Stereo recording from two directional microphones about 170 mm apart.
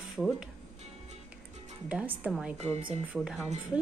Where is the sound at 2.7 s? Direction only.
35° right (ahead or behind).